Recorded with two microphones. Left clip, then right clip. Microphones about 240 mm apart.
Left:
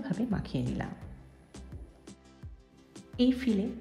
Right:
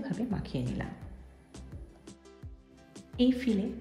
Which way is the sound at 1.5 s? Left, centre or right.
Centre.